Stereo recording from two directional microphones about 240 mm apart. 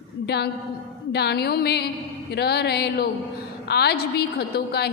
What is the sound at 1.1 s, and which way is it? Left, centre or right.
A woman's voice, left.